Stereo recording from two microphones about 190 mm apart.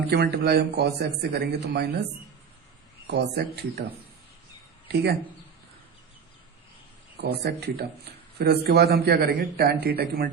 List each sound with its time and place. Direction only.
0.1 s a man's voice: 60° right (ahead or behind)
3.1 s a man's voice: 60° right (ahead or behind)
7.2 s a man's voice: 60° right (ahead or behind)